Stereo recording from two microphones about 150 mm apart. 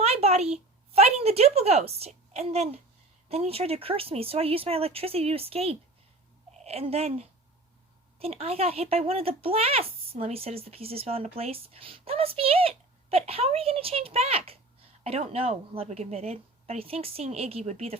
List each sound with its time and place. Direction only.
0.0 s a woman's voice: 45° right (ahead or behind)